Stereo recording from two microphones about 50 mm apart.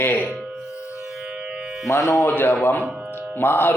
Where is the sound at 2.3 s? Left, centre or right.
Left.